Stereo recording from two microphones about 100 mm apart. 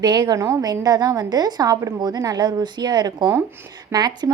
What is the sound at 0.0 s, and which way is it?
Speech, 45° right (ahead or behind).